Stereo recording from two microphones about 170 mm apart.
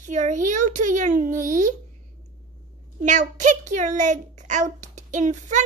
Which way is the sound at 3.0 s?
45° right (ahead or behind).